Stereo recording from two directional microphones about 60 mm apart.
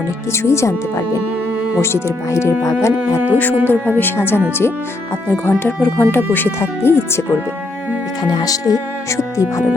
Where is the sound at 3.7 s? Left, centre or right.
Left.